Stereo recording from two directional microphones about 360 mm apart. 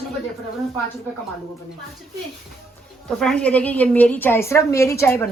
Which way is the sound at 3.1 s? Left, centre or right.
Centre.